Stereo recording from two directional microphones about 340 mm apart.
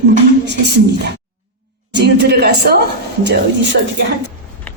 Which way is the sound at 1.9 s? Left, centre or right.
Right.